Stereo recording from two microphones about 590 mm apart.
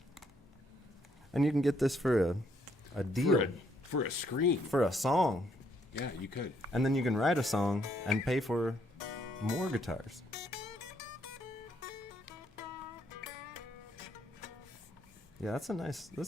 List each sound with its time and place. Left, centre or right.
1.3 s speech: centre
3.9 s speech: left
4.7 s speech: centre
5.9 s speech: left
6.7 s speech: centre
15.4 s speech: centre